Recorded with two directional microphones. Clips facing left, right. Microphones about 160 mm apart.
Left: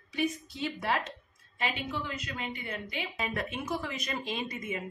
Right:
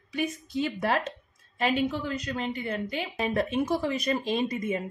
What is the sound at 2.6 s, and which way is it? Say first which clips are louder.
A woman's voice: right 6 dB; 40° right (ahead or behind).